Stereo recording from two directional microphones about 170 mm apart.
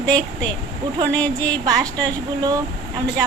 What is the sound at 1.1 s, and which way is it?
Speech, 5° left (ahead or behind).